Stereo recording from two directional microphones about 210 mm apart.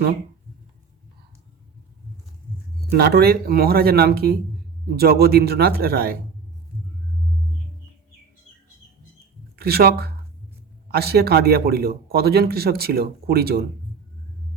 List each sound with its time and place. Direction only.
2.9 s speech: 50° right (ahead or behind)
9.6 s speech: 50° right (ahead or behind)